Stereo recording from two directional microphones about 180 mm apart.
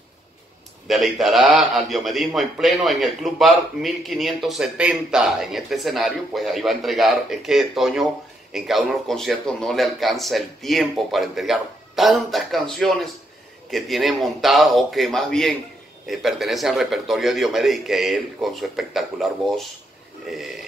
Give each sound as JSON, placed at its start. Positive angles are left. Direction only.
{"t": 0.8, "sound": "a man's voice", "side_deg": 0}